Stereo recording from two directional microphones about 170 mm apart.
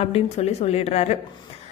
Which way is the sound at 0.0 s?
35° left (ahead or behind).